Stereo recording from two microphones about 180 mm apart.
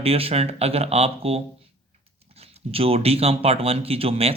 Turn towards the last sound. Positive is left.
turn(degrees=-30)  # may be behind; listen again after turning